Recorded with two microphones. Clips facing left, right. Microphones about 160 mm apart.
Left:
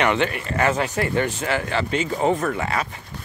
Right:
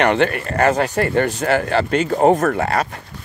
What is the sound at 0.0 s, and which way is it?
Speech, 45° right (ahead or behind).